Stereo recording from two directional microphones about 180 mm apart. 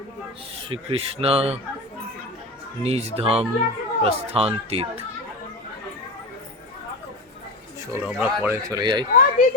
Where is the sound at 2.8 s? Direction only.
35° right (ahead or behind).